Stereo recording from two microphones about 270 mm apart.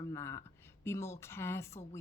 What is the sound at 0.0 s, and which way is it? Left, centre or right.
Speech, centre.